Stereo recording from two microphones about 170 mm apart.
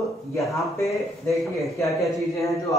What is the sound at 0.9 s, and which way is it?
Speech, centre (ahead or behind).